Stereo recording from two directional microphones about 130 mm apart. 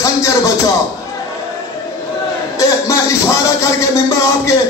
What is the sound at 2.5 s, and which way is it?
Speech, 25° left (ahead or behind).